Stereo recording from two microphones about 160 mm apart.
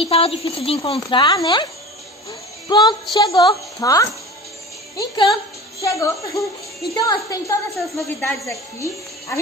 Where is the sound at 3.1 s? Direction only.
25° left (ahead or behind).